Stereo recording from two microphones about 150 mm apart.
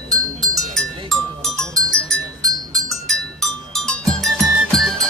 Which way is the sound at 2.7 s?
Centre (ahead or behind).